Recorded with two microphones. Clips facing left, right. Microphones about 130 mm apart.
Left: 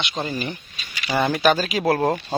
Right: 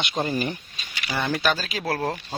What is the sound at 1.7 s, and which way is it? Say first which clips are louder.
Speech: left 7 dB; 20° left (ahead or behind).